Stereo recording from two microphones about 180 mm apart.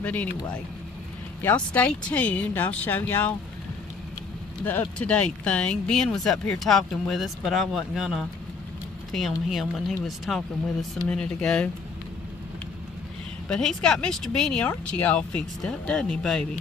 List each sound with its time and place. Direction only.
0.0 s speech: 10° left (ahead or behind)
1.4 s speech: 10° left (ahead or behind)
4.6 s speech: 10° left (ahead or behind)
9.5 s speech: centre (ahead or behind)
13.5 s speech: 5° left (ahead or behind)